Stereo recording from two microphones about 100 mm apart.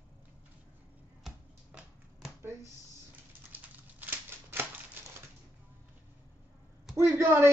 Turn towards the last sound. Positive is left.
turn(degrees=-25)  # may be behind; listen again after turning